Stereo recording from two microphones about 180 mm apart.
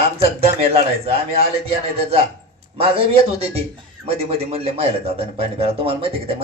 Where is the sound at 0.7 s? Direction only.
35° right (ahead or behind).